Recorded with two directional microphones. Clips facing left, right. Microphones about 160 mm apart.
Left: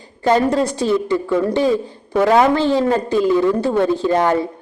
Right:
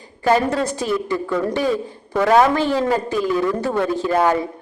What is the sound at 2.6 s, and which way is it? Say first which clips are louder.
Speech: left 3 dB; 25° left (ahead or behind).